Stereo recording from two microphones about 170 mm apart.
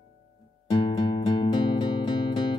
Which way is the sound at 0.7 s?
30° left (ahead or behind).